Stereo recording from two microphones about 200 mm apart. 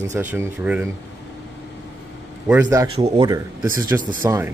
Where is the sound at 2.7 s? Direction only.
20° right (ahead or behind).